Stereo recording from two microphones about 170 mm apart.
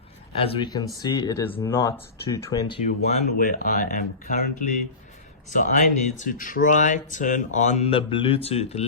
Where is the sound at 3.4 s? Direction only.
55° left (ahead or behind).